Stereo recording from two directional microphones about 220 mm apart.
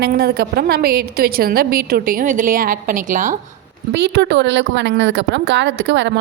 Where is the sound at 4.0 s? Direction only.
50° right (ahead or behind).